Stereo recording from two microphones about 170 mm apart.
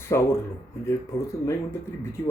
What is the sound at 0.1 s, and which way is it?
Speech, 15° left (ahead or behind).